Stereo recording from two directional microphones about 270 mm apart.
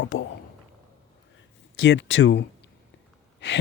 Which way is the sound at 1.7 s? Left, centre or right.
Left.